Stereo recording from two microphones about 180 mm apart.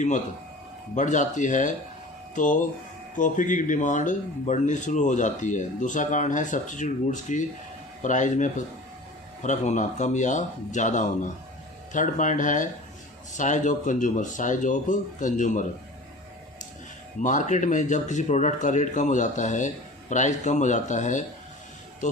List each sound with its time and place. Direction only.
0.9 s speech: 45° left (ahead or behind)
17.2 s speech: 45° left (ahead or behind)